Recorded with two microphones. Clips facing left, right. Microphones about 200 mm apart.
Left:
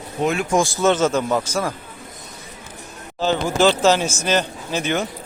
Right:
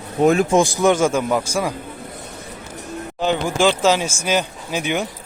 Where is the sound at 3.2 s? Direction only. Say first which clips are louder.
Left 1 dB; 15° right (ahead or behind).